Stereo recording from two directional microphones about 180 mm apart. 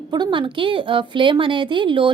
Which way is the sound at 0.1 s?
25° right (ahead or behind).